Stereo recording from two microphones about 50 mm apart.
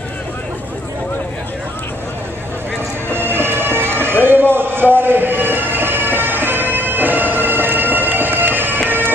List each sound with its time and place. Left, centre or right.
3.1 s bagpipes: right